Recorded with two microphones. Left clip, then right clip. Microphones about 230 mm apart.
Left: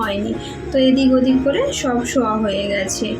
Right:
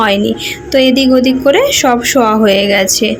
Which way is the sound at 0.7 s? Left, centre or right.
Right.